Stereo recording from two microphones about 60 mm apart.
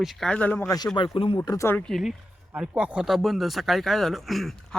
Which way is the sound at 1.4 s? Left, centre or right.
Left.